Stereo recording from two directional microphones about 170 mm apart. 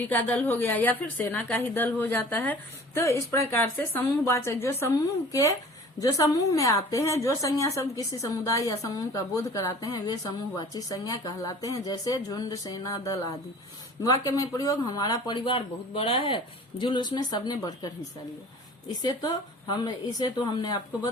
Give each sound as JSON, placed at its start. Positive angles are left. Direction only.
{"t": 0.0, "sound": "a woman's voice", "side_deg": 10}
{"t": 19.0, "sound": "a woman's voice", "side_deg": 25}